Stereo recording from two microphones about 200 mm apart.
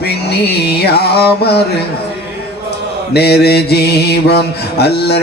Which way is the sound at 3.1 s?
55° left (ahead or behind).